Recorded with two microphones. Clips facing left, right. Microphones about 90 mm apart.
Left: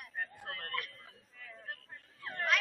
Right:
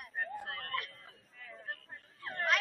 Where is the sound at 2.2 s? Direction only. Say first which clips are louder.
Even; centre (ahead or behind).